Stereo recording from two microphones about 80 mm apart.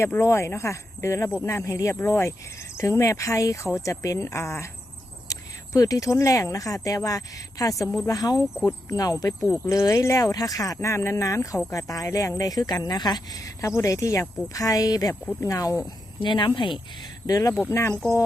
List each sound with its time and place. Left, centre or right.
0.0 s speech: left
10.8 s speech: left
16.2 s speech: left
17.2 s speech: left
17.7 s speech: left